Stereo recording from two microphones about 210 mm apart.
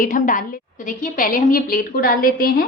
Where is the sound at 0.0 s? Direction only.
40° left (ahead or behind).